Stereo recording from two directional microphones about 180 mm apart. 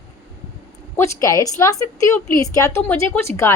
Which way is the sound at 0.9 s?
15° left (ahead or behind).